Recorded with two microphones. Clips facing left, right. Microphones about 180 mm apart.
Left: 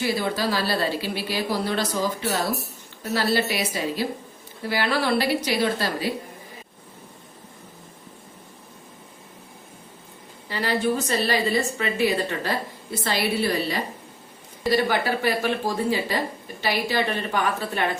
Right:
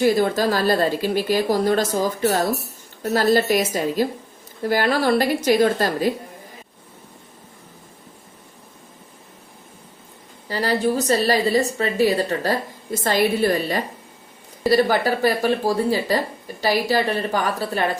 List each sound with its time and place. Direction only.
0.0 s speech: 45° right (ahead or behind)
10.5 s a woman's voice: 40° right (ahead or behind)